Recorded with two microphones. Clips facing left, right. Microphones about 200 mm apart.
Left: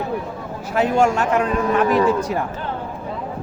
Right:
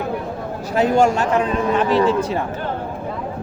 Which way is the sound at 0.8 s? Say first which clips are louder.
Right 2 dB; 35° right (ahead or behind).